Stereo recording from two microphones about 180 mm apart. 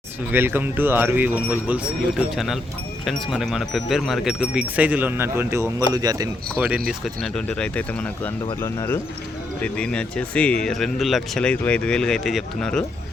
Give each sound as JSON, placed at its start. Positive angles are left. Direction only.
{"t": 0.3, "sound": "speech", "side_deg": -10}
{"t": 6.6, "sound": "speech", "side_deg": -5}
{"t": 7.2, "sound": "speech", "side_deg": 5}